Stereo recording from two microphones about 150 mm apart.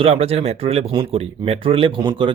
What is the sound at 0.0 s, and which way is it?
Speech, 40° right (ahead or behind).